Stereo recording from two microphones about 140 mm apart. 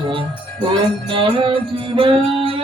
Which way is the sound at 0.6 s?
35° right (ahead or behind).